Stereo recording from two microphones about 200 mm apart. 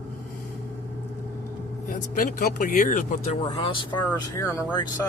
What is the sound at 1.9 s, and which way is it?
Speech, 45° left (ahead or behind).